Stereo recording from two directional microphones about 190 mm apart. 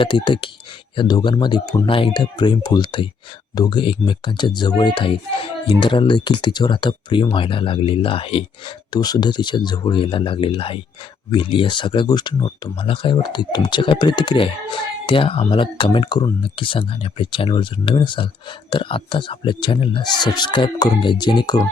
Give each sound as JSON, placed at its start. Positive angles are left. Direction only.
{"t": 0.0, "sound": "speech", "side_deg": 25}